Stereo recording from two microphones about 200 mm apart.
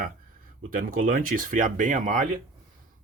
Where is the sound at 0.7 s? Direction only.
45° right (ahead or behind).